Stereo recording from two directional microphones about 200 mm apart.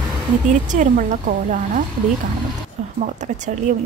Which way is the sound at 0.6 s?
40° right (ahead or behind).